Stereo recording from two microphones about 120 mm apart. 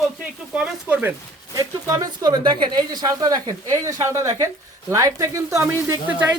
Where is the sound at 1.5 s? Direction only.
30° right (ahead or behind).